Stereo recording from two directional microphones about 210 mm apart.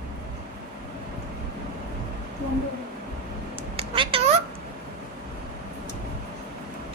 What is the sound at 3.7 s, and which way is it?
Cat, 25° right (ahead or behind).